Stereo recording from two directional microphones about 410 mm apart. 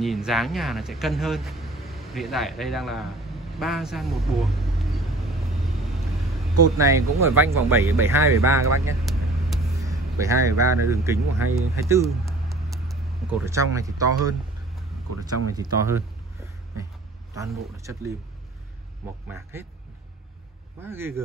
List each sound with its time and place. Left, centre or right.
0.0 s speech: centre
3.5 s vehicle: centre
6.8 s speech: centre
15.0 s speech: right
15.5 s speech: centre
17.4 s speech: centre
19.2 s speech: centre
20.8 s speech: centre